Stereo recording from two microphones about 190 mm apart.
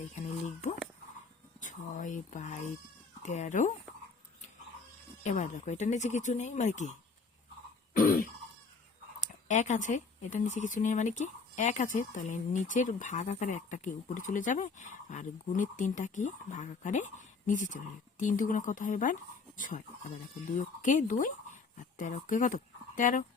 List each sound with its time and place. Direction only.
0.4 s speech: 35° left (ahead or behind)
5.2 s speech: 40° left (ahead or behind)
7.9 s cough: 50° left (ahead or behind)
9.2 s speech: 40° left (ahead or behind)
19.5 s cough: 45° left (ahead or behind)
20.6 s speech: 45° left (ahead or behind)